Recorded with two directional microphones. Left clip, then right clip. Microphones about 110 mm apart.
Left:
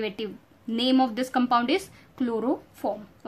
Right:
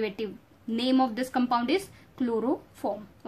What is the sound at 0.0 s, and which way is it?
Speech, 15° left (ahead or behind).